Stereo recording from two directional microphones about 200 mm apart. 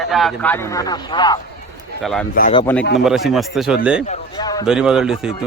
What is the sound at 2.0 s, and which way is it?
Speech, centre (ahead or behind).